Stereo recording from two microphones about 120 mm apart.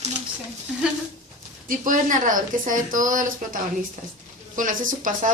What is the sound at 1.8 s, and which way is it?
A woman's voice, 90° right.